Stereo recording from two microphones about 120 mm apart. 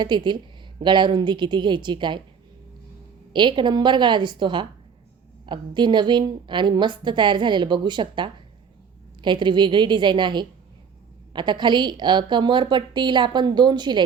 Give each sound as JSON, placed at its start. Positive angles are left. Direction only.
{"t": 0.0, "sound": "a woman's voice", "side_deg": -40}
{"t": 3.3, "sound": "a woman's voice", "side_deg": -40}